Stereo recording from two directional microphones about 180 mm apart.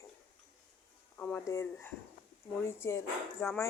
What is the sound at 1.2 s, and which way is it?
Speech, 10° left (ahead or behind).